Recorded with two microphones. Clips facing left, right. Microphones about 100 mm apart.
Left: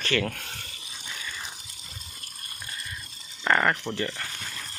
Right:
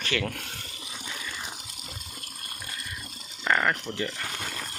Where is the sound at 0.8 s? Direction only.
50° right (ahead or behind).